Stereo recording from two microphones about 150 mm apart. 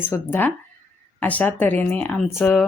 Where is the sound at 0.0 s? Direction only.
15° left (ahead or behind).